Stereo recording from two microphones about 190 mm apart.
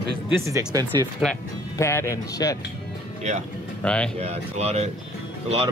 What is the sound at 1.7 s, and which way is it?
Speech, 15° left (ahead or behind).